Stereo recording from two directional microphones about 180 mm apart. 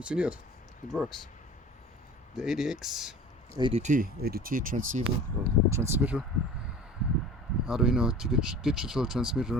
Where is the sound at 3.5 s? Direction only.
30° right (ahead or behind); by 4.8 s 50° right (ahead or behind).